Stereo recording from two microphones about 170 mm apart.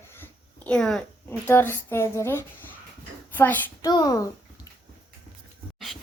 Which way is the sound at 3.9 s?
25° left (ahead or behind).